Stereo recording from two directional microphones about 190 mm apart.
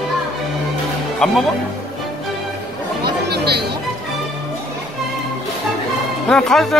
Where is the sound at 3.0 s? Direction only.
60° right (ahead or behind).